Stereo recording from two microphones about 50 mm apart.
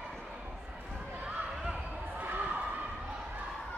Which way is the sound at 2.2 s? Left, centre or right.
Right.